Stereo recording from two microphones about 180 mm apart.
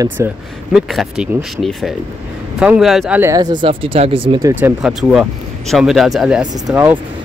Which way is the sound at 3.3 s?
20° right (ahead or behind).